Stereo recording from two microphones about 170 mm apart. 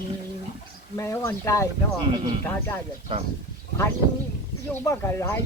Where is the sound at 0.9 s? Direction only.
15° left (ahead or behind).